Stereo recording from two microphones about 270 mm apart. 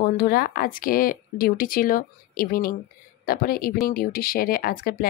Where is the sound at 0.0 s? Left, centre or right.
Left.